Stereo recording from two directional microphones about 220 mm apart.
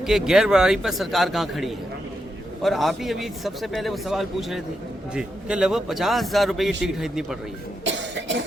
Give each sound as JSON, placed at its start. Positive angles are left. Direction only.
{"t": 0.0, "sound": "a man's voice", "side_deg": 0}
{"t": 7.9, "sound": "cough", "side_deg": -55}